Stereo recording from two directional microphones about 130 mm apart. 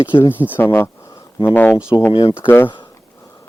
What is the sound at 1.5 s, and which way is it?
Speech, 15° left (ahead or behind).